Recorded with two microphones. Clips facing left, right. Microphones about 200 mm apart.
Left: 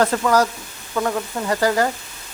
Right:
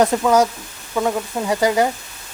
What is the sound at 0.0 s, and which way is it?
Speech, 15° right (ahead or behind).